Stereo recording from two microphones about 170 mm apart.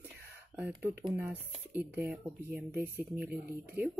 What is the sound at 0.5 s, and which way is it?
Speech, 10° right (ahead or behind).